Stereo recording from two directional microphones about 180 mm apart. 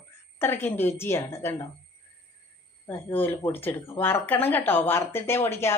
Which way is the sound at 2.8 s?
10° left (ahead or behind).